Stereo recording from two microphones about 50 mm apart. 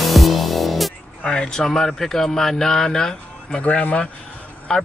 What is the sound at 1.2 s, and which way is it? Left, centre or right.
Speech, centre.